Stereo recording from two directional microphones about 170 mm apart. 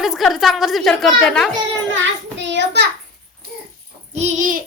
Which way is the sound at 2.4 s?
90° right.